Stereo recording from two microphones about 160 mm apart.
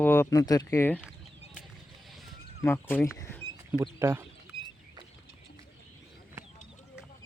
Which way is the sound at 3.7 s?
15° right (ahead or behind).